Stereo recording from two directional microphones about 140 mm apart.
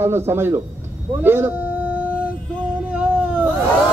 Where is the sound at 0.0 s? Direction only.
15° right (ahead or behind).